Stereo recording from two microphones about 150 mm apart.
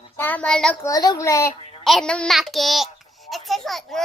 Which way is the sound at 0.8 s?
25° left (ahead or behind).